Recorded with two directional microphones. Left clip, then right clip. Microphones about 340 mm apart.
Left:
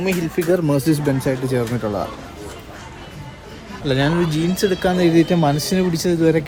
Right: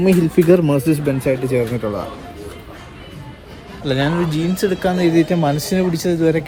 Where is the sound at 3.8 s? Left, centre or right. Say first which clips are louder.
Even; centre.